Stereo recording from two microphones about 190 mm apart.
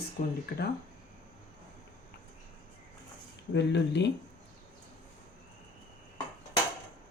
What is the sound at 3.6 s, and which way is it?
Speech, 65° left (ahead or behind).